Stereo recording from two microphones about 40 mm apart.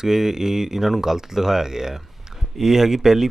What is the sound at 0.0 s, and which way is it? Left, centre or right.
Speech, centre.